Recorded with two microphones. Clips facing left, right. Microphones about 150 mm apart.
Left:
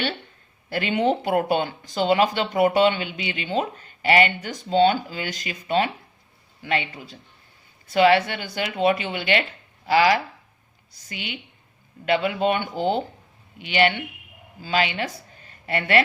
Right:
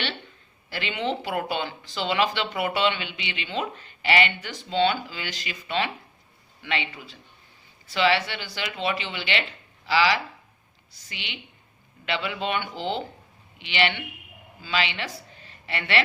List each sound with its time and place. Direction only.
0.7 s speech: 45° left (ahead or behind)